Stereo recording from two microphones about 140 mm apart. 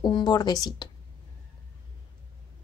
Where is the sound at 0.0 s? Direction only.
30° left (ahead or behind).